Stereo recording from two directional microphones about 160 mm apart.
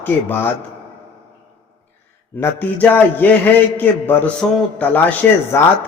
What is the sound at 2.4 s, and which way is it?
A man's voice, 10° left (ahead or behind).